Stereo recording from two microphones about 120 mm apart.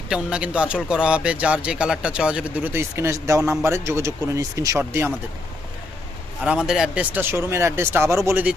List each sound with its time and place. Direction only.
0.1 s speech: 10° right (ahead or behind)
6.4 s speech: 10° right (ahead or behind)